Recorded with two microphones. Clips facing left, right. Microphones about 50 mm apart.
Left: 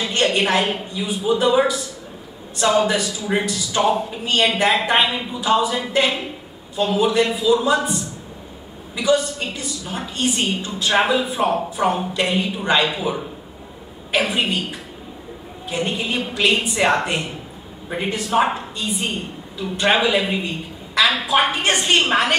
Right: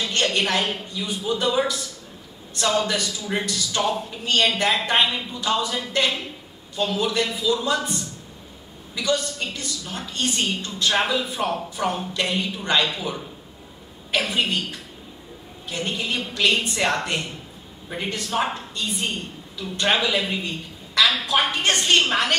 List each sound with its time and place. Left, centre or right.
0.0 s a woman's voice: centre
8.9 s a woman's voice: centre